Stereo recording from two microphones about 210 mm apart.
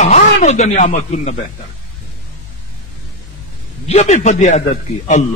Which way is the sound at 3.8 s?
30° left (ahead or behind).